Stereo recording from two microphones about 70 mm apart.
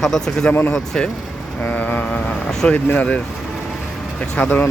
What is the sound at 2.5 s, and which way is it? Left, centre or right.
Speech, centre.